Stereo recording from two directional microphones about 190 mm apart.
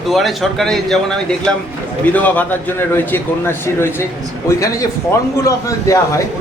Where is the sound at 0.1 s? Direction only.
Centre (ahead or behind).